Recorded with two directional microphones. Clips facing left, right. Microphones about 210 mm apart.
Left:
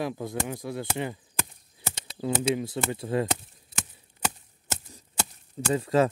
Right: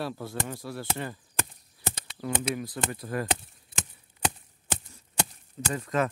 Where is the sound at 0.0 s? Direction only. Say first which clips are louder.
Left 3 dB; 15° left (ahead or behind).